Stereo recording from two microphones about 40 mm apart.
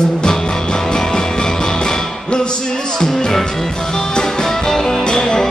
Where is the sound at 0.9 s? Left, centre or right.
Centre.